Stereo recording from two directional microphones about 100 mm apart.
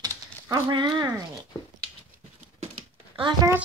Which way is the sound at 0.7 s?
50° right (ahead or behind).